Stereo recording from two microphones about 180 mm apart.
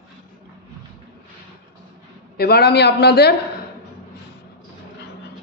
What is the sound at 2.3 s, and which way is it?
A man's voice, 60° left (ahead or behind).